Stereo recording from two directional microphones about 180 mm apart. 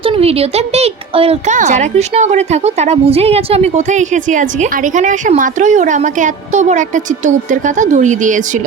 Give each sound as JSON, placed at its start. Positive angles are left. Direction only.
{"t": 0.0, "sound": "speech", "side_deg": -30}